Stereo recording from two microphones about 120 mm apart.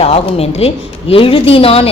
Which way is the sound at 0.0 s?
55° left (ahead or behind).